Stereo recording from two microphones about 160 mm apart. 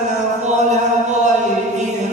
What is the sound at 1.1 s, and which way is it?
Mantra, 45° right (ahead or behind).